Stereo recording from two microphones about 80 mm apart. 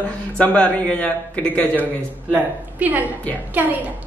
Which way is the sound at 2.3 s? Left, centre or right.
Right.